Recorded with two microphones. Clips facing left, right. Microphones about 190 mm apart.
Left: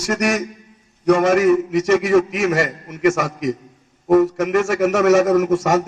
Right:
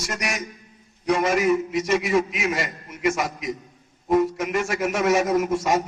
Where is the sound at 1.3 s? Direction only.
50° left (ahead or behind).